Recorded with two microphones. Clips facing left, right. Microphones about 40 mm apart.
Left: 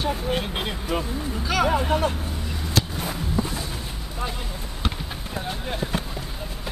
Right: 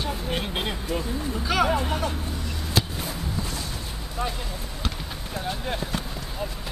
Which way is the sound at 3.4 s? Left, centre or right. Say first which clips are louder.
Left 9 dB; centre.